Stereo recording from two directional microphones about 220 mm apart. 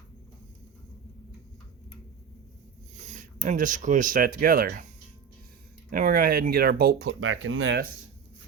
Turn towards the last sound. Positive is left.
turn(degrees=-60)  # may be behind; listen again after turning